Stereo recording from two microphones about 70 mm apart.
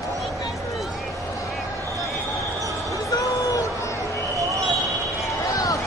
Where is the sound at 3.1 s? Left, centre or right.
Left.